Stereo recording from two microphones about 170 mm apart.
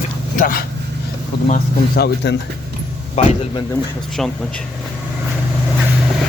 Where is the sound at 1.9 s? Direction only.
80° left.